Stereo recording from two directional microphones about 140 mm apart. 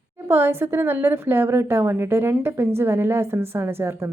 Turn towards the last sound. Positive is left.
turn(degrees=-15)  # may be behind; listen again after turning